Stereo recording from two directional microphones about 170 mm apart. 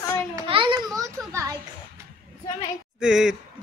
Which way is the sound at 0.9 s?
20° right (ahead or behind).